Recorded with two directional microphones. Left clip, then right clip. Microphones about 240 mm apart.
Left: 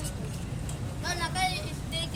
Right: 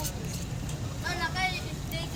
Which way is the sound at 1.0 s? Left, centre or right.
Left.